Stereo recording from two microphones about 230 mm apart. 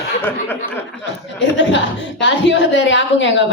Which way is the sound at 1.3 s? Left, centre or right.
Left.